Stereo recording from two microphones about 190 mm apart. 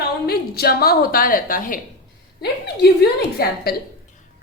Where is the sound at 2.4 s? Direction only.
60° left (ahead or behind).